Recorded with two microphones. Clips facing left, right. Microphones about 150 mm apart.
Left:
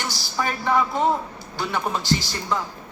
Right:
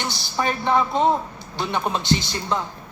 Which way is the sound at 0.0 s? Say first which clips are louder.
Right 2 dB; 20° right (ahead or behind).